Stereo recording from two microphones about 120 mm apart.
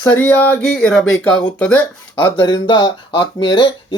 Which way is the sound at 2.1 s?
40° left (ahead or behind).